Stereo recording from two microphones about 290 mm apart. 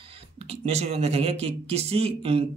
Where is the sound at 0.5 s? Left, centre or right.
Right.